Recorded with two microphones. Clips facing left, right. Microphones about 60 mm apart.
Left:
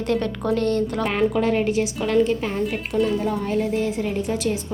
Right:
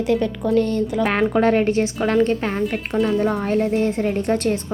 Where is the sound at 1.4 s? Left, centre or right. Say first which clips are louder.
Right 3 dB; right.